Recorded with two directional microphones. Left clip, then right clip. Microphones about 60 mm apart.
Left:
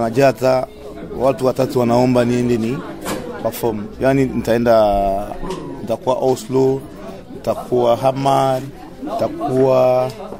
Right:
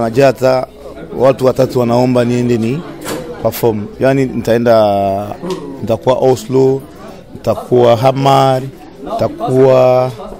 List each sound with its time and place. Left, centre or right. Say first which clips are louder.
0.0 s speech: right 4 dB; centre
1.8 s a man's voice: right 3 dB; centre; by 3.8 s right
4.0 s a man's voice: right 3 dB; centre